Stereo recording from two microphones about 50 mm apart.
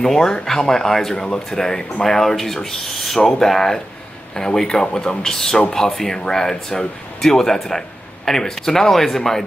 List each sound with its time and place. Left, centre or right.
0.0 s speech: centre